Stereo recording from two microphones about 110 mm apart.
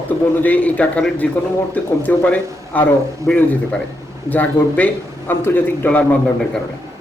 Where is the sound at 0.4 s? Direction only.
15° left (ahead or behind).